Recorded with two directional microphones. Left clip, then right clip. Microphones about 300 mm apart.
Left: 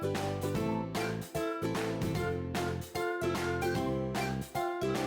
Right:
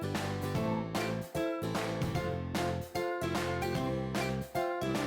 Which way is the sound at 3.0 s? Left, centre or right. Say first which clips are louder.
Left 2 dB; centre.